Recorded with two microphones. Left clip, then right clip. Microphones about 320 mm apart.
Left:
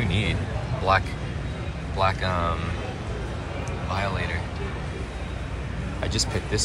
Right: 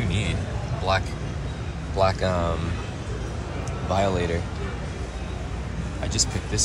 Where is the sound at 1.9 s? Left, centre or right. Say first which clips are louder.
Right 2 dB; centre.